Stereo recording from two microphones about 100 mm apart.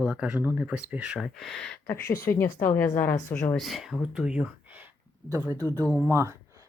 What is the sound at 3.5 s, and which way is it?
Speech, centre (ahead or behind).